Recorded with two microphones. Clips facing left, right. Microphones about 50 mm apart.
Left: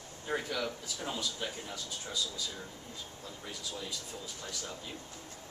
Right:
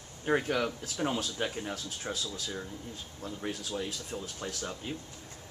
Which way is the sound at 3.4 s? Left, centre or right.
Right.